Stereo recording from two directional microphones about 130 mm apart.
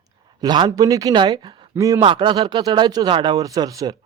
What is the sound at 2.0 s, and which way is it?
Speech, 40° right (ahead or behind).